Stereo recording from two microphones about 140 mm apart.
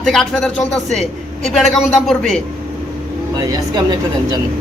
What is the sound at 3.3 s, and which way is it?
Speech, 25° right (ahead or behind).